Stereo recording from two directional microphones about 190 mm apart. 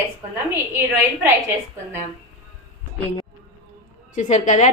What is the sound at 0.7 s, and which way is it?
Speech, 15° right (ahead or behind).